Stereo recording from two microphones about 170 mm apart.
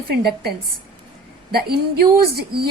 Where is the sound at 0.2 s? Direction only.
70° right (ahead or behind).